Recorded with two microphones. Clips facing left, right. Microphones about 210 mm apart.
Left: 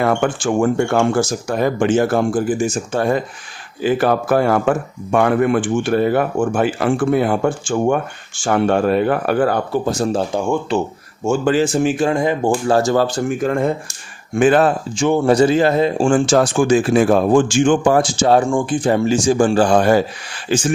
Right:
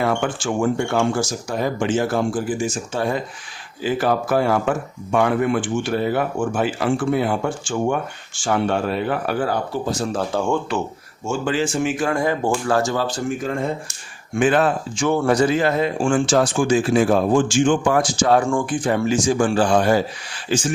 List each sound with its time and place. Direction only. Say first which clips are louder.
0.0 s speech: left 4 dB; 55° left (ahead or behind)
10.3 s speech: left 2 dB; 10° left (ahead or behind)
11.3 s speech: left 6 dB; 40° left (ahead or behind); by 12.5 s 20° left (ahead or behind)
12.5 s speech: left 6 dB; 35° left (ahead or behind)
12.9 s speech: left 6 dB; 45° left (ahead or behind)
14.3 s speech: left 4 dB; 40° left (ahead or behind)
15.0 s speech: left 4 dB; 20° left (ahead or behind); by 17.7 s 55° left (ahead or behind)
17.8 s speech: left 4 dB; 30° left (ahead or behind)